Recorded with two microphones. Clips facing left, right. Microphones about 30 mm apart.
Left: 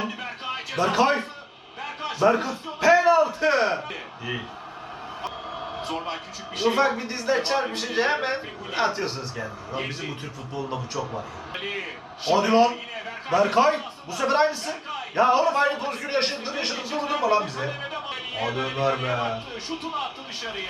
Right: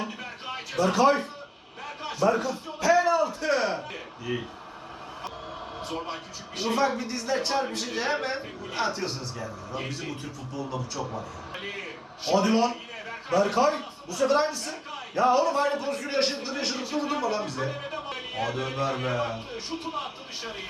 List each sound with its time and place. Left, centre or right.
0.0 s a sound: left
1.8 s a man's voice: left
5.9 s a man's voice: left